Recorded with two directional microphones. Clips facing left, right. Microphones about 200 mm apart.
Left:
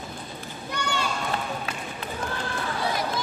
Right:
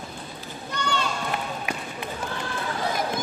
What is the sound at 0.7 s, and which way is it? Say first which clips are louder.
Run: right 1 dB; 10° left (ahead or behind).